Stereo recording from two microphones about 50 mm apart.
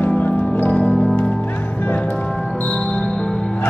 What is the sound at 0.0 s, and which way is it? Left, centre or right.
Music, left.